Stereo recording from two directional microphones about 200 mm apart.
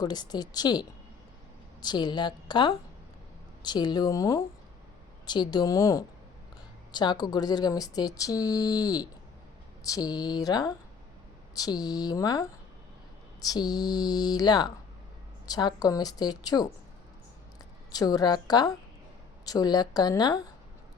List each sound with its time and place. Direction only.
0.0 s speech: 20° left (ahead or behind)
17.9 s speech: 20° left (ahead or behind)